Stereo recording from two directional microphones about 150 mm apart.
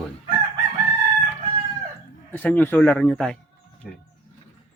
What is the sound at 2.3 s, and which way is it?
A man's voice, 10° left (ahead or behind).